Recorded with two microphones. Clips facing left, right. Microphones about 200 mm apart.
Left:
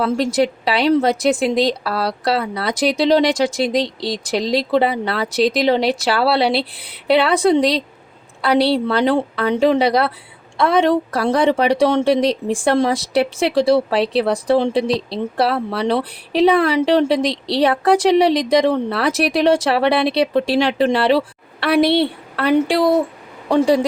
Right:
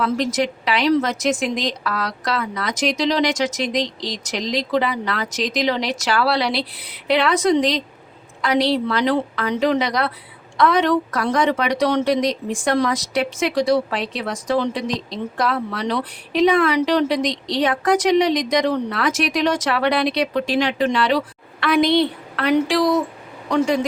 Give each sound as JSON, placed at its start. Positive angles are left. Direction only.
{"t": 0.0, "sound": "speech", "side_deg": 30}
{"t": 21.8, "sound": "a woman's voice", "side_deg": 60}